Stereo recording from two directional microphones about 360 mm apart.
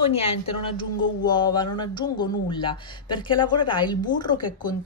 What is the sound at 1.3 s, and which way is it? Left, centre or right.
Speech, centre.